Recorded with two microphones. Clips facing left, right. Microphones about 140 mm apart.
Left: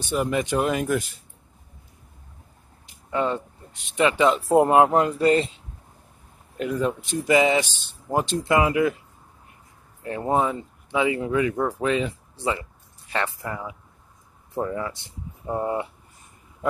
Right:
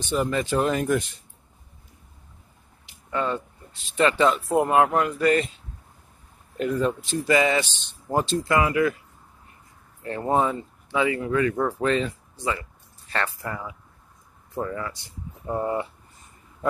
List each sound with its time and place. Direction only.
0.0 s speech: 10° left (ahead or behind)
3.1 s speech: 20° left (ahead or behind)
4.3 s speech: 30° left (ahead or behind)
6.5 s speech: 10° left (ahead or behind)
10.0 s speech: 10° left (ahead or behind)
11.0 s speech: 20° left (ahead or behind)
12.4 s speech: 25° left (ahead or behind)